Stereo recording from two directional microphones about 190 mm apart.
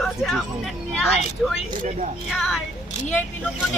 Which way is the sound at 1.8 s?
40° right (ahead or behind).